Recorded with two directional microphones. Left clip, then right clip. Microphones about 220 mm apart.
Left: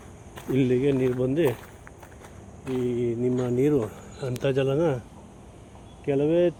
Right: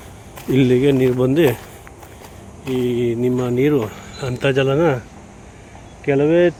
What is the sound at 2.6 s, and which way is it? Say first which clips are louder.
Speech: right 7 dB; 5° right (ahead or behind).